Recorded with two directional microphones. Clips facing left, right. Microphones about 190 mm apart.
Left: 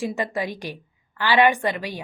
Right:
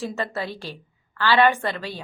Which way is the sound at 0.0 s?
15° left (ahead or behind).